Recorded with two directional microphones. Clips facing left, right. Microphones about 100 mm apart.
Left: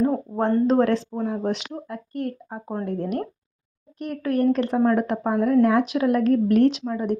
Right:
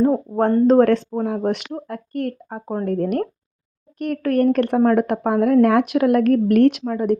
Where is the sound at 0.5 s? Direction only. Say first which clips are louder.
Right 5 dB; 45° right (ahead or behind).